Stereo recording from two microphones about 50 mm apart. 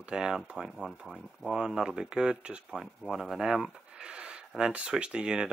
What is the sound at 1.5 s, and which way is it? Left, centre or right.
Speech, centre.